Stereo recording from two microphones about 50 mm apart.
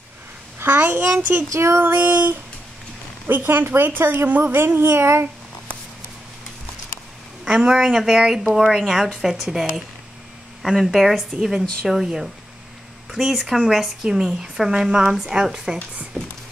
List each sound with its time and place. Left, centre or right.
0.6 s a child's voice: right
1.5 s music: right
1.8 s a child's voice: right
4.3 s speech: right
7.4 s speech: centre